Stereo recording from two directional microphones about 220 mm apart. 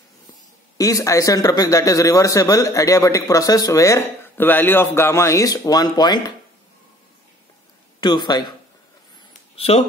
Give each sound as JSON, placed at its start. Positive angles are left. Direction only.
{"t": 0.7, "sound": "a man's voice", "side_deg": 15}
{"t": 8.0, "sound": "speech", "side_deg": 20}
{"t": 9.6, "sound": "speech", "side_deg": 25}